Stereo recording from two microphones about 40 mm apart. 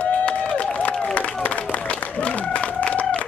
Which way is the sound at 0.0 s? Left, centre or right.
Left.